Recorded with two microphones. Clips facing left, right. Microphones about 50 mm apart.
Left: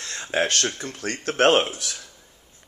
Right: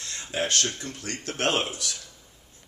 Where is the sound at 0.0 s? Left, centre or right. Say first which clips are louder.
Left 5 dB; left.